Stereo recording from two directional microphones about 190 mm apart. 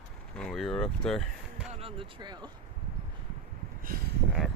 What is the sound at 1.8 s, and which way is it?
Speech, 30° right (ahead or behind).